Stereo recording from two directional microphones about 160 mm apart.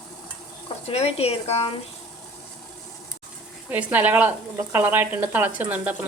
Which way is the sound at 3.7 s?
10° right (ahead or behind).